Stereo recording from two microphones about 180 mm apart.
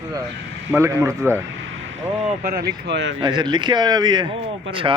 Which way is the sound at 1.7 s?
90° right.